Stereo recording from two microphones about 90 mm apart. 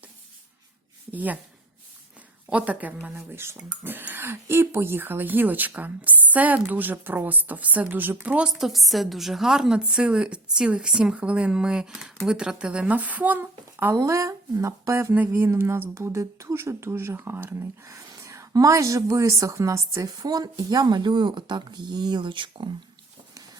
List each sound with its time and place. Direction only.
1.1 s speech: 20° right (ahead or behind)
2.5 s a woman's voice: 15° right (ahead or behind)
3.2 s speech: 30° right (ahead or behind)
8.4 s a woman's voice: 5° right (ahead or behind); by 13.9 s 20° right (ahead or behind)
13.9 s speech: 35° right (ahead or behind)
15.1 s a woman's voice: 20° right (ahead or behind); by 22.7 s 65° right (ahead or behind)